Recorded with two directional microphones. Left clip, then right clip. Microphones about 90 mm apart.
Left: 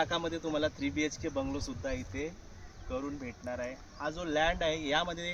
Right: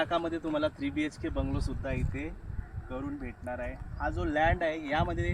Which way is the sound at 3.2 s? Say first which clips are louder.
Right 1 dB; 35° left (ahead or behind).